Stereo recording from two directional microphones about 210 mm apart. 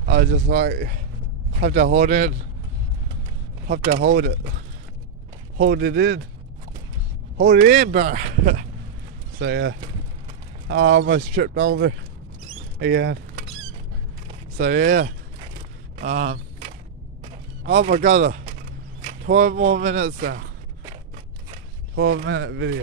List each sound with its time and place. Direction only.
0.0 s speech: 45° right (ahead or behind)
3.6 s speech: 45° right (ahead or behind)
5.6 s speech: 50° right (ahead or behind)
7.4 s speech: 35° right (ahead or behind)
9.4 s speech: 55° right (ahead or behind); by 11.7 s 40° right (ahead or behind)
12.7 s creak: 50° right (ahead or behind)
14.6 s speech: 45° right (ahead or behind)
17.7 s speech: 35° right (ahead or behind)
21.9 s speech: 55° right (ahead or behind)